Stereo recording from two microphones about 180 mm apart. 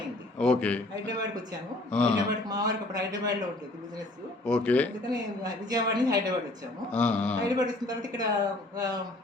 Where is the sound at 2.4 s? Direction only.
20° right (ahead or behind).